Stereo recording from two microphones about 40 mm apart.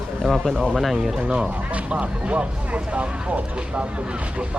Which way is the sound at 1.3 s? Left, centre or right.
Right.